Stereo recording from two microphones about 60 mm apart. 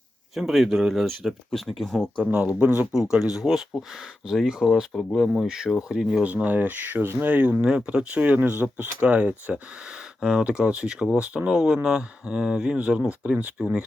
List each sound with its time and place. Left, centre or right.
0.3 s a man's voice: centre
2.2 s speech: centre
2.9 s speech: centre
4.9 s a man's voice: centre
5.5 s speech: centre
6.2 s speech: right
7.7 s speech: centre
10.2 s speech: centre